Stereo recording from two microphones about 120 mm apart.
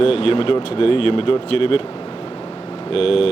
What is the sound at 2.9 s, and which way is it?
Speech, 55° left (ahead or behind).